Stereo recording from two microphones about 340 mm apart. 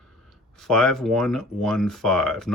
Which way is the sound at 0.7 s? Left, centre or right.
Centre.